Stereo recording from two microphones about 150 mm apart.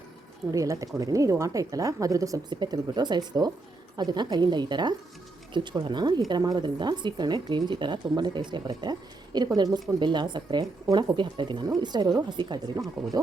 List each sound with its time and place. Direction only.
0.5 s speech: 20° right (ahead or behind)